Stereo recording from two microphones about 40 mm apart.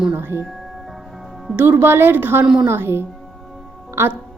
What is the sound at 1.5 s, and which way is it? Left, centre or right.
Speech, right.